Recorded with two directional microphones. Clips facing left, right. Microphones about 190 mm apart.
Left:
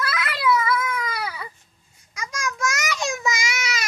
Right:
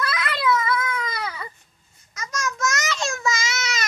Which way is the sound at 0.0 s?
5° left (ahead or behind).